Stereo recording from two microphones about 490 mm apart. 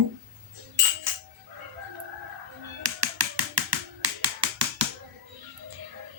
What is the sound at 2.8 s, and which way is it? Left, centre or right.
Finger snapping, right.